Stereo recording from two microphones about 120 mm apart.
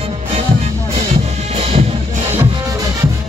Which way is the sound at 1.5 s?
60° right (ahead or behind).